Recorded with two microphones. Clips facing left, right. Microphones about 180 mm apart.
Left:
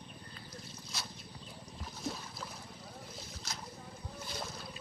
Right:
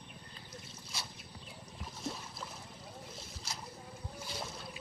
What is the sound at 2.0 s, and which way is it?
Boat, centre (ahead or behind).